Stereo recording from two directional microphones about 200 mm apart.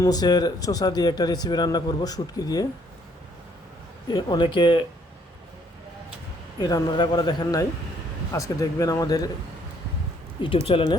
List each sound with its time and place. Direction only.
0.0 s speech: 20° left (ahead or behind)
4.1 s speech: 20° left (ahead or behind)
6.6 s speech: 20° left (ahead or behind)
10.4 s speech: 25° left (ahead or behind)